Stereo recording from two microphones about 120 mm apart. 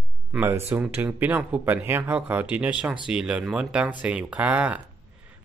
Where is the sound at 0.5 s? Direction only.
20° right (ahead or behind).